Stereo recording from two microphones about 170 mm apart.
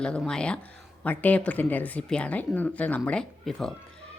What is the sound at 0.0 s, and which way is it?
Speech, 5° left (ahead or behind).